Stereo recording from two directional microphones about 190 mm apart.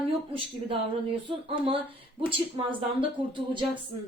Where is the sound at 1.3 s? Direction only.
25° right (ahead or behind).